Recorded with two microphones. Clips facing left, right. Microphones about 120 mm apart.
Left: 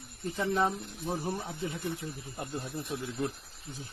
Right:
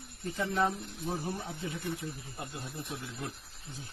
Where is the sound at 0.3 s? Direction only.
25° left (ahead or behind).